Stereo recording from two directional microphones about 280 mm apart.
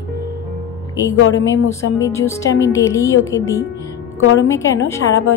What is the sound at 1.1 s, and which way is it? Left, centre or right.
Speech, left.